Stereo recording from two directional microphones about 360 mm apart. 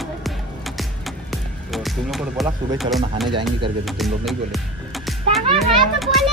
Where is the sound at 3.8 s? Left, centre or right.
Centre.